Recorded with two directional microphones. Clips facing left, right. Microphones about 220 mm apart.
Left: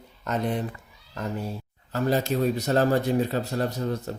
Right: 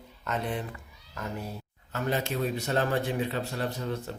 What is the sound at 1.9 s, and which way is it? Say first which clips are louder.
Speech: left 6 dB; 35° left (ahead or behind).